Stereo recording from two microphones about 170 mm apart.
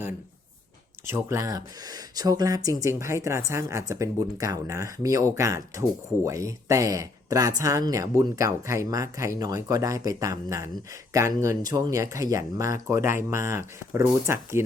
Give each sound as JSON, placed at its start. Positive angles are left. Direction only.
{"t": 1.0, "sound": "speech", "side_deg": -15}